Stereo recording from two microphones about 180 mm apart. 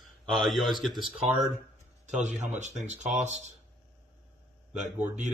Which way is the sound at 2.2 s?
40° right (ahead or behind).